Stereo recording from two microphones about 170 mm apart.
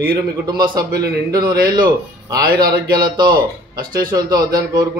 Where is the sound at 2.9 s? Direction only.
25° right (ahead or behind).